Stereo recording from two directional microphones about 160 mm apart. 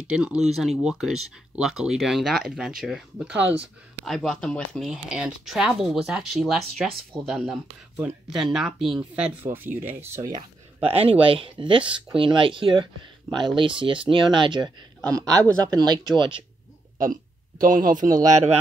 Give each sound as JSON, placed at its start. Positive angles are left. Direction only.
{"t": 0.0, "sound": "speech", "side_deg": -5}
{"t": 10.8, "sound": "speech", "side_deg": -35}
{"t": 16.0, "sound": "speech", "side_deg": 0}
{"t": 17.0, "sound": "speech", "side_deg": -55}
{"t": 18.2, "sound": "speech", "side_deg": -45}